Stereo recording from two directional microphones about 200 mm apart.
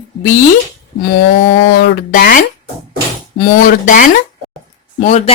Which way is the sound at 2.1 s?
45° left (ahead or behind).